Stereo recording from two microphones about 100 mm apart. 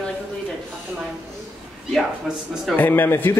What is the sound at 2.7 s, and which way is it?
Speech, 20° left (ahead or behind).